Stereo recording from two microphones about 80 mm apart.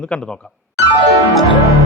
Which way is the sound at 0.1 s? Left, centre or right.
Centre.